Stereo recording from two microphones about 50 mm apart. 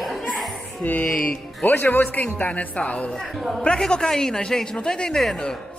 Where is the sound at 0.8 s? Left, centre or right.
Left.